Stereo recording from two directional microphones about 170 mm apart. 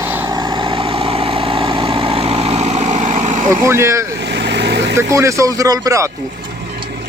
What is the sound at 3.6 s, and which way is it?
Speech, 15° right (ahead or behind).